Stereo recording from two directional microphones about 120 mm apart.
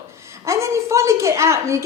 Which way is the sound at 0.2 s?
25° right (ahead or behind).